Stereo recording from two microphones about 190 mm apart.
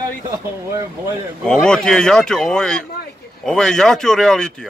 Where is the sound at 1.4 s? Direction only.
5° left (ahead or behind).